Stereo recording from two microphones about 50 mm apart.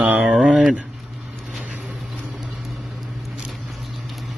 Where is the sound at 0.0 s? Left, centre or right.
Right.